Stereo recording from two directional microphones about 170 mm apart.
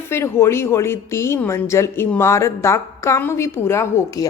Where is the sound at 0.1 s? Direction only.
15° left (ahead or behind).